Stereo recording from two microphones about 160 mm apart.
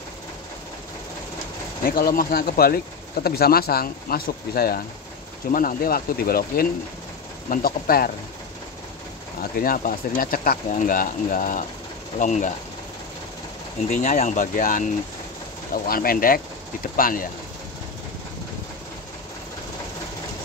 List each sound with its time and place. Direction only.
1.9 s speech: 65° left (ahead or behind)
5.5 s speech: 60° left (ahead or behind)
9.4 s speech: 65° left (ahead or behind)
12.2 s speech: 50° left (ahead or behind)
13.8 s speech: 50° left (ahead or behind)